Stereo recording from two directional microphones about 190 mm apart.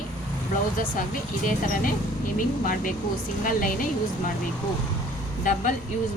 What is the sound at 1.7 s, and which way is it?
A woman's voice, 45° left (ahead or behind).